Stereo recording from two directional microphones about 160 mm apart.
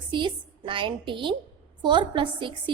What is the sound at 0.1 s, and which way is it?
A woman's voice, 30° right (ahead or behind).